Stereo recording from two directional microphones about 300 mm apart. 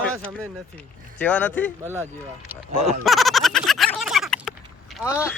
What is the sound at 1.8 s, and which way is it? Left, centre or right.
Speech, centre.